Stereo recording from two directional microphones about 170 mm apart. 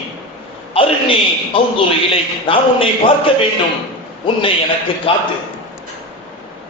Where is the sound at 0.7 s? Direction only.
30° left (ahead or behind).